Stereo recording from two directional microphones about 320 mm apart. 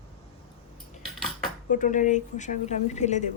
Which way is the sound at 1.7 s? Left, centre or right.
Left.